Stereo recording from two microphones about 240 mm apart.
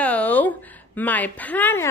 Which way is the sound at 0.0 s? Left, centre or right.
Centre.